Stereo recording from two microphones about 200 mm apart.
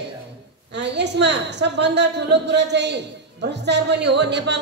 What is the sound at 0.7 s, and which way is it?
A man's voice, 60° right (ahead or behind).